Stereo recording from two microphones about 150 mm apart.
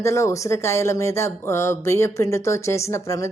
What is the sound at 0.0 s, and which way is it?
Speech, 20° left (ahead or behind).